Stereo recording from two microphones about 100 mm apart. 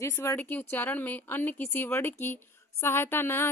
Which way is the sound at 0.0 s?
30° left (ahead or behind).